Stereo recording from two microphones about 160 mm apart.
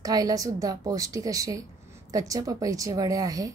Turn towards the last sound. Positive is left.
turn(degrees=-20)  # may be behind; listen again after turning